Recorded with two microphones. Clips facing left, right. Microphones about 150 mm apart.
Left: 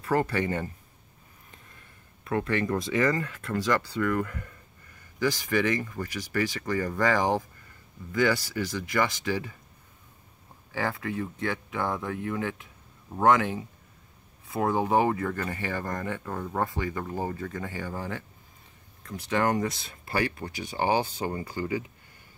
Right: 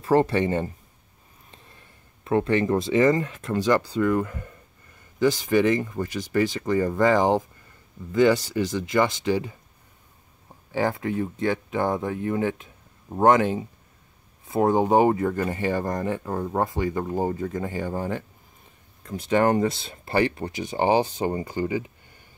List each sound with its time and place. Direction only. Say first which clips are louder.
0.0 s speech: right 6 dB; 25° right (ahead or behind)
2.2 s speech: right 6 dB; 25° right (ahead or behind)
10.7 s speech: right 6 dB; 20° right (ahead or behind)